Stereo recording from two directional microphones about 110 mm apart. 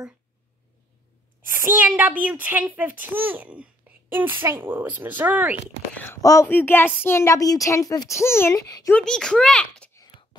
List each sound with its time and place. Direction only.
1.4 s a child's voice: 20° right (ahead or behind)
6.4 s speech: 20° left (ahead or behind)
9.0 s a child's voice: 5° left (ahead or behind)